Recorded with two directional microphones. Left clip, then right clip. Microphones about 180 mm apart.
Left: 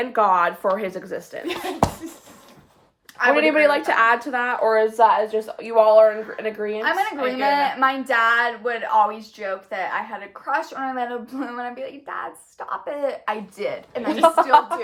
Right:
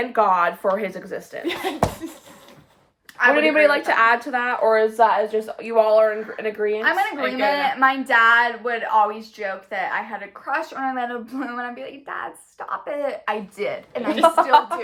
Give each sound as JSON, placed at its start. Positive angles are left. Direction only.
{"t": 0.0, "sound": "speech", "side_deg": 20}
{"t": 3.3, "sound": "speech", "side_deg": 20}
{"t": 6.8, "sound": "speech", "side_deg": 0}
{"t": 7.2, "sound": "a woman's voice", "side_deg": -15}
{"t": 7.6, "sound": "speech", "side_deg": 0}
{"t": 14.2, "sound": "speech", "side_deg": 20}